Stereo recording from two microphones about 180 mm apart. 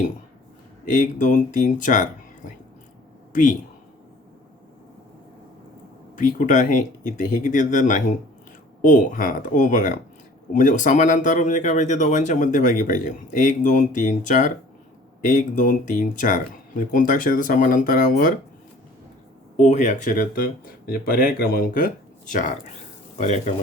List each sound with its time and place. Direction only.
0.9 s speech: 45° left (ahead or behind)
6.1 s speech: 45° left (ahead or behind)
19.5 s speech: 40° left (ahead or behind)